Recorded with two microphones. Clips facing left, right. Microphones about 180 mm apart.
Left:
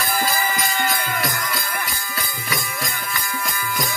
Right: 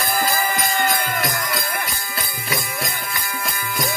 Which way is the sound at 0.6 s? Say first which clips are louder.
Right 2 dB; 55° right (ahead or behind).